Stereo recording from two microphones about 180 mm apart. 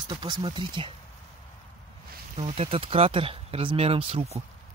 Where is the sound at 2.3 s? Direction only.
35° right (ahead or behind).